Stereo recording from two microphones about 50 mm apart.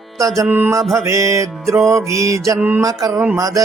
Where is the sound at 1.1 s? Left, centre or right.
Right.